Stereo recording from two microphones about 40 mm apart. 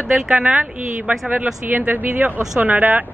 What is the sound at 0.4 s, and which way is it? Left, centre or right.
Speech, right.